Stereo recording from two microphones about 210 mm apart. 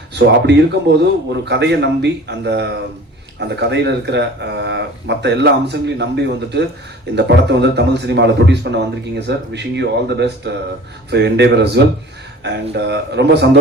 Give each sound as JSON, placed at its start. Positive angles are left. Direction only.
{"t": 0.1, "sound": "a man's voice", "side_deg": -55}